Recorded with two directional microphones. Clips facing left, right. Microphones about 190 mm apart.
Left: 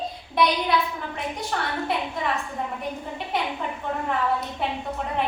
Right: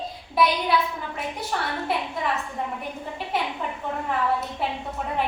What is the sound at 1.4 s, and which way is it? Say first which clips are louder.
Speech: left 1 dB; 5° right (ahead or behind).